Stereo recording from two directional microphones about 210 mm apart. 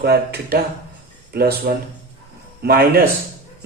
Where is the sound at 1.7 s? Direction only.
45° right (ahead or behind).